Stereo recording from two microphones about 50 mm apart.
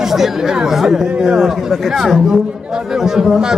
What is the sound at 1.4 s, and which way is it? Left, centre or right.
A man's voice, centre.